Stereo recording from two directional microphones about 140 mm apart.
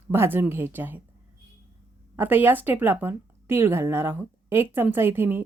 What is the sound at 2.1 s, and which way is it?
Speech, 15° right (ahead or behind).